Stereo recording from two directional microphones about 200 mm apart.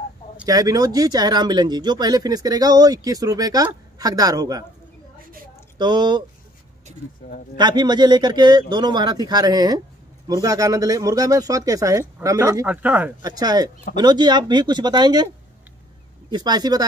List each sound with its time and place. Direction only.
0.5 s speech: 20° right (ahead or behind)
5.8 s speech: 20° right (ahead or behind)
7.5 s speech: 20° right (ahead or behind)
13.2 s speech: 20° right (ahead or behind)
16.3 s speech: 20° right (ahead or behind)